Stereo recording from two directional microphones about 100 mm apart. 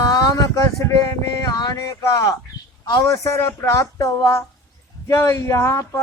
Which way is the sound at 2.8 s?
45° left (ahead or behind).